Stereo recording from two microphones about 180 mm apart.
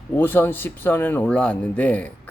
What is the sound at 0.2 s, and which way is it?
Speech, 10° left (ahead or behind).